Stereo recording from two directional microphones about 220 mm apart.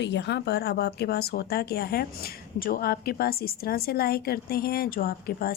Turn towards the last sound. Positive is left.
turn(degrees=40)  # may be behind; listen again after turning